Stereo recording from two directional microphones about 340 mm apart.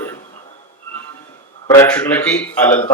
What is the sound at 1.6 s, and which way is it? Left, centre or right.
A man's voice, centre.